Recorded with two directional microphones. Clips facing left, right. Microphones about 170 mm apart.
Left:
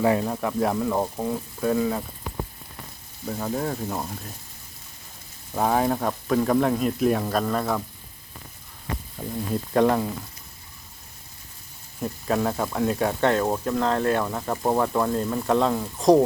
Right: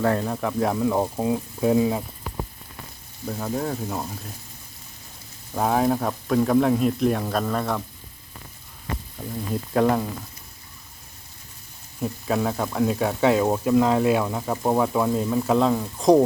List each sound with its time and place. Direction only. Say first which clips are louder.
0.0 s speech: left 1 dB; 5° left (ahead or behind); by 2.0 s 15° right (ahead or behind)
3.2 s speech: even; centre (ahead or behind)
5.5 s speech: right 1 dB; centre (ahead or behind)
9.2 s speech: left 3 dB; 10° left (ahead or behind)
9.7 s speech: even; centre (ahead or behind)
11.9 s speech: even; centre (ahead or behind)